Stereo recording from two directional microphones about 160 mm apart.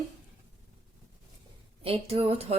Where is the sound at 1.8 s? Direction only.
35° right (ahead or behind).